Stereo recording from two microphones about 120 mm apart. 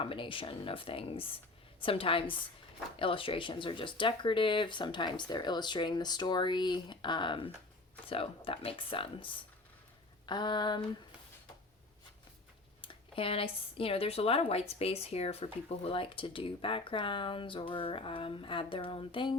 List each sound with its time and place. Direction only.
0.0 s speech: 45° left (ahead or behind)
12.8 s speech: 45° left (ahead or behind)